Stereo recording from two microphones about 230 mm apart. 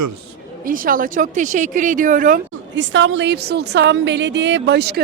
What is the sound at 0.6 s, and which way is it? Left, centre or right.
Speech, right.